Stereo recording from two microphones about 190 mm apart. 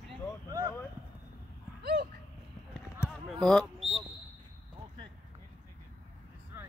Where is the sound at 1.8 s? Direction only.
55° right (ahead or behind).